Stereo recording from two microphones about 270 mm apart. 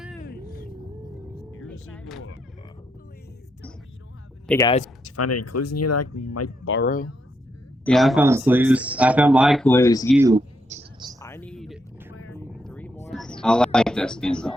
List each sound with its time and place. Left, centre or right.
0.2 s music: left
1.4 s music: centre
4.4 s speech: centre
5.0 s speech: left
6.7 s speech: left
7.9 s speech: centre
10.1 s speech: centre
10.7 s a sound: right
11.2 s a sound: centre
12.4 s vehicle: centre
13.1 s speech: centre